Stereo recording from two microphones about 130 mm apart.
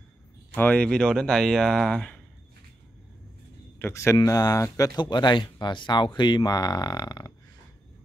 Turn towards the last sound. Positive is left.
turn(degrees=30)  # may be behind; listen again after turning